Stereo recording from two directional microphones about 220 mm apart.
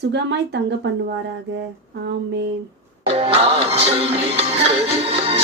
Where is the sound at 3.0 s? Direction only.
25° right (ahead or behind).